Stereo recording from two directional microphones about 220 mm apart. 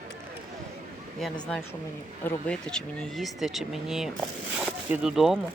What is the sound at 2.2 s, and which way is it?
Speech, 5° left (ahead or behind).